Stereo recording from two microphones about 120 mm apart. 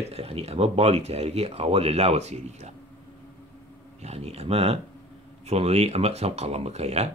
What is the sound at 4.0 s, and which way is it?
Speech, 60° right (ahead or behind).